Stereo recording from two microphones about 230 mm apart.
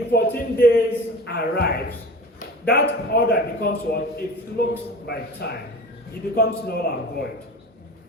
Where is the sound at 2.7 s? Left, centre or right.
Left.